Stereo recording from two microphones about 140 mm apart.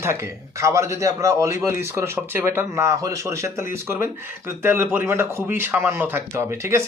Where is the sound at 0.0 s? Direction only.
20° right (ahead or behind).